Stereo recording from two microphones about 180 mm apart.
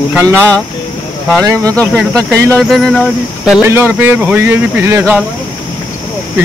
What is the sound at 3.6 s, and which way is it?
Speech, 10° right (ahead or behind).